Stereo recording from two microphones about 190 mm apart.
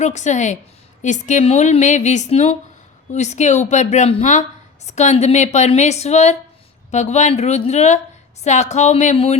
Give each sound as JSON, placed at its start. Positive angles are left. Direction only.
{"t": 0.0, "sound": "a woman's voice", "side_deg": 40}